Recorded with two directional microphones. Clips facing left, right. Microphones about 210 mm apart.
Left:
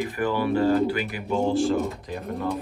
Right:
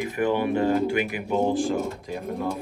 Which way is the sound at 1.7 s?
Centre (ahead or behind).